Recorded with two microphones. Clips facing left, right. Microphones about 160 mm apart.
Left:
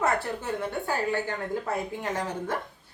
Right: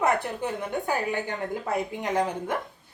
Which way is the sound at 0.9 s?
15° right (ahead or behind).